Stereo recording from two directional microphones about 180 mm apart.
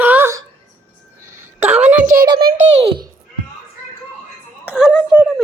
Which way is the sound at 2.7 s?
30° right (ahead or behind).